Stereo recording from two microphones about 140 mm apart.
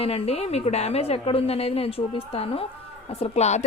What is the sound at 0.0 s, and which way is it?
A woman's voice, 45° left (ahead or behind).